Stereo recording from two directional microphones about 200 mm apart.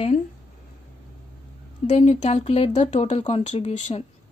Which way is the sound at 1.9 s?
35° left (ahead or behind).